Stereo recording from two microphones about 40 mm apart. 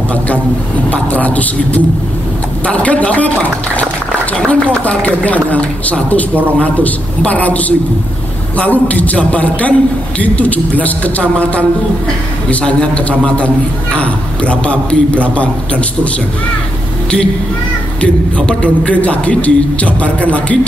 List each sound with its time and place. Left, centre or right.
0.8 s a man's voice: left
4.5 s a man's voice: left
18.0 s a man's voice: left